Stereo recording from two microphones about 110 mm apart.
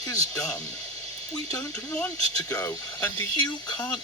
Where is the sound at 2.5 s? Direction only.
25° left (ahead or behind).